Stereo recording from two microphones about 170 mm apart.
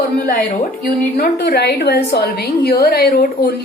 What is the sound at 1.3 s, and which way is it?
A woman's voice, 80° left.